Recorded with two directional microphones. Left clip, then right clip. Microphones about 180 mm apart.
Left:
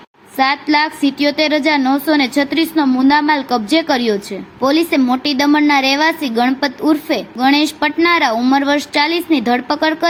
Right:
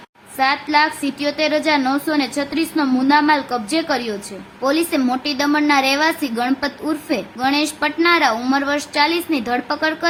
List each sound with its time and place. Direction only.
0.3 s a woman's voice: 25° left (ahead or behind)